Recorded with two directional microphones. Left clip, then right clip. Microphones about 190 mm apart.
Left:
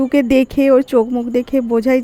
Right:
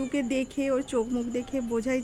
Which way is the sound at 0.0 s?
35° left (ahead or behind).